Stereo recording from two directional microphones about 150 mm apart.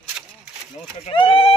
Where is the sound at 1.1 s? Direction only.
40° left (ahead or behind).